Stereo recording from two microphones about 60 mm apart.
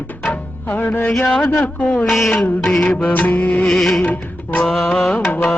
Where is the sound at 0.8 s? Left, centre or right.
Left.